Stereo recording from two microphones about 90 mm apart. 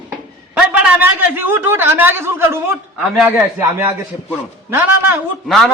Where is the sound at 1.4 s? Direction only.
25° right (ahead or behind).